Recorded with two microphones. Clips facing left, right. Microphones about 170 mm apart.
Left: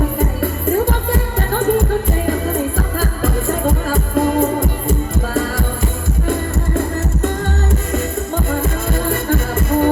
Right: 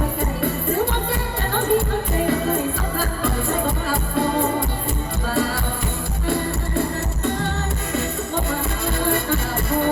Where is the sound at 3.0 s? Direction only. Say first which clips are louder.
Left 3 dB; 45° left (ahead or behind).